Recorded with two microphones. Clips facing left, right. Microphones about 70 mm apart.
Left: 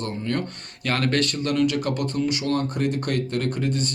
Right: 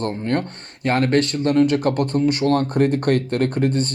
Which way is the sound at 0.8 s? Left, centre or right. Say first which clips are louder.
Right 5 dB; right.